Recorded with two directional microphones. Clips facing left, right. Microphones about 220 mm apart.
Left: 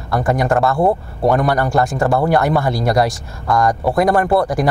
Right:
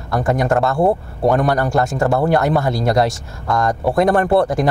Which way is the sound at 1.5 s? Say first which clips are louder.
Left 1 dB; 45° right (ahead or behind).